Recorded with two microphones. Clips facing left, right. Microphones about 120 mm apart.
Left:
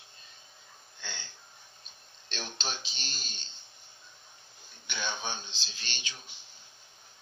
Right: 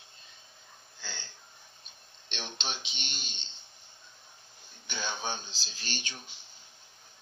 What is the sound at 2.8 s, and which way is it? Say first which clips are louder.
Speech: right 1 dB; 35° left (ahead or behind).